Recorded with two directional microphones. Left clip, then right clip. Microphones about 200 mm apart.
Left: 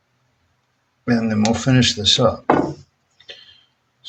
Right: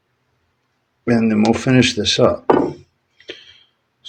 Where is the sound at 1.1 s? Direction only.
35° right (ahead or behind).